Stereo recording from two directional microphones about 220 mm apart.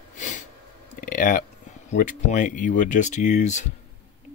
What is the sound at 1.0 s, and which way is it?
Speech, 40° left (ahead or behind).